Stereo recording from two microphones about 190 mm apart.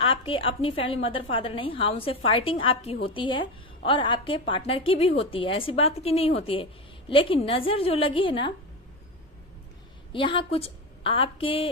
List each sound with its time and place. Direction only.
0.0 s a woman's voice: 30° left (ahead or behind)
10.1 s a woman's voice: 25° left (ahead or behind)